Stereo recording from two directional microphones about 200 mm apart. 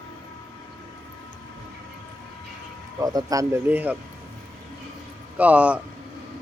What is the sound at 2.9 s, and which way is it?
Speech, 15° right (ahead or behind).